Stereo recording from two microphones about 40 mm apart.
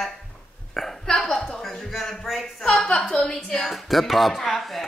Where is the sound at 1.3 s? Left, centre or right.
Centre.